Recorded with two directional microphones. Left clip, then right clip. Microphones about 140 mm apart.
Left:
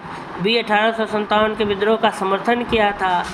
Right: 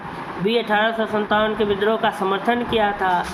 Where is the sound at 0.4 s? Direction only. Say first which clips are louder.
Left 2 dB; 40° left (ahead or behind).